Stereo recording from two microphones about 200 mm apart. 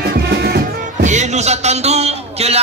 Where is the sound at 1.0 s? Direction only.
35° right (ahead or behind).